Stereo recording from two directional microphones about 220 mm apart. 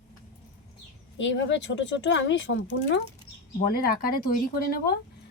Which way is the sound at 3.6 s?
45° left (ahead or behind).